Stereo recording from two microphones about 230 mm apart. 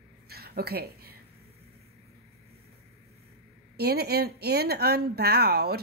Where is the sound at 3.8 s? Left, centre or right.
Right.